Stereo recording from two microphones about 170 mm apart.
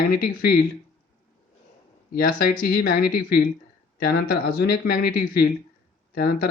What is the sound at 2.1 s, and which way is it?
Speech, 60° left (ahead or behind).